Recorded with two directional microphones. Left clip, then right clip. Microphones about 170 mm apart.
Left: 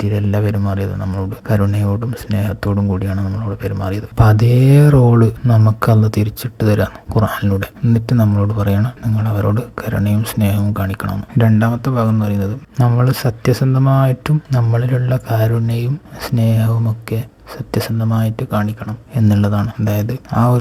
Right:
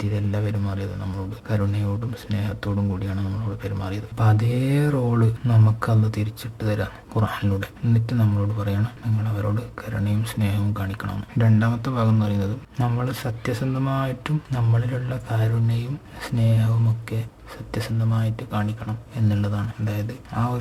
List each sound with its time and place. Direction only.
0.0 s speech: 30° left (ahead or behind)
5.8 s speech: 35° left (ahead or behind)
11.1 s speech: 20° left (ahead or behind); by 20.6 s 40° left (ahead or behind)